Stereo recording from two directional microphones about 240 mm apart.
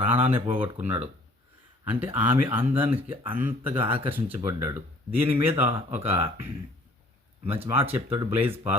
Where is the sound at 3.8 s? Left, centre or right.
Right.